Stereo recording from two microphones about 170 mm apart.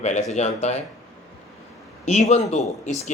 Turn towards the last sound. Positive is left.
turn(degrees=45)  # may be behind; listen again after turning